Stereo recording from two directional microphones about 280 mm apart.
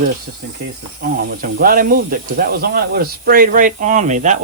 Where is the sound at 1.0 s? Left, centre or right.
Right.